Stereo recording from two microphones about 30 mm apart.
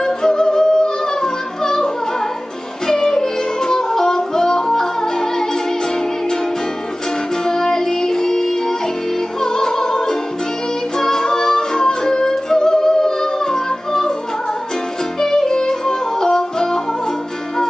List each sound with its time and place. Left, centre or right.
0.0 s music: centre
2.9 s music: left
7.4 s music: centre
15.1 s music: centre